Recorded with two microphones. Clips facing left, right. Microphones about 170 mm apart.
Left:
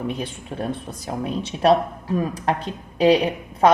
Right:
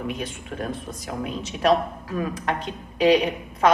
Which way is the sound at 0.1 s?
30° left (ahead or behind).